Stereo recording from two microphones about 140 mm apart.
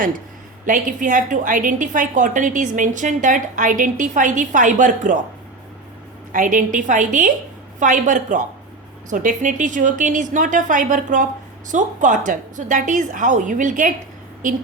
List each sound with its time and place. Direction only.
0.6 s a woman's voice: 70° right (ahead or behind)
6.3 s a woman's voice: 70° right (ahead or behind)